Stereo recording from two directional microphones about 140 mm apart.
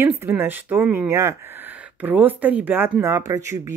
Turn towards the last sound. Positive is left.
turn(degrees=-20)  # may be behind; listen again after turning